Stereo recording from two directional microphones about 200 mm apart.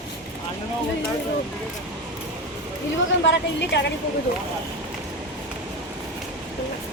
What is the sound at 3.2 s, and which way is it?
Speech, 60° left (ahead or behind).